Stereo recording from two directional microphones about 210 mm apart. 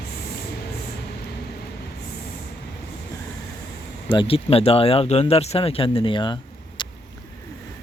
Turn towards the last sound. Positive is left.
turn(degrees=20)  # may be behind; listen again after turning